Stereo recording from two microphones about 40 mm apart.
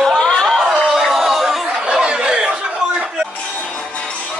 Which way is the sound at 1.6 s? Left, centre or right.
Centre.